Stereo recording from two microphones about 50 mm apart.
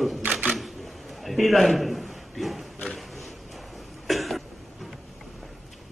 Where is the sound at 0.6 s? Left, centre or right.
Centre.